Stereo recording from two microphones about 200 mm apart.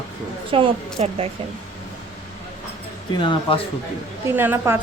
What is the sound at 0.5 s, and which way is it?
Speech, 30° right (ahead or behind).